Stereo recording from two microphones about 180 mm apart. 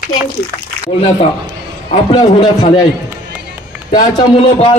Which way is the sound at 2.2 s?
30° left (ahead or behind).